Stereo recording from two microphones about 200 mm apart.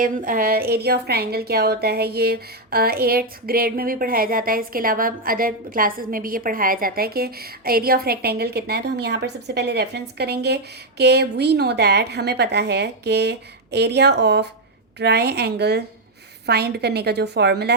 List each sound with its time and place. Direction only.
0.0 s a woman's voice: 45° right (ahead or behind)